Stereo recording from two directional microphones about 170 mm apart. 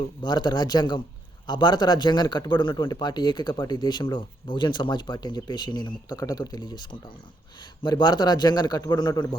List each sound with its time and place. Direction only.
0.2 s speech: 25° left (ahead or behind)